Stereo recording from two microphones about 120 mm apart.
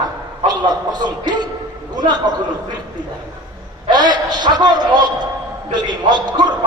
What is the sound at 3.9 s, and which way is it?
A man's voice, 35° right (ahead or behind).